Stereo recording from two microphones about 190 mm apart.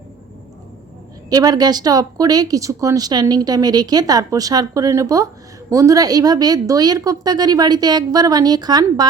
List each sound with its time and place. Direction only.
1.3 s speech: 20° right (ahead or behind)